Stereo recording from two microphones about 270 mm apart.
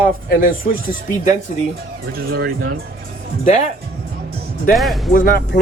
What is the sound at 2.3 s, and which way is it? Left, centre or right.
Speech, right.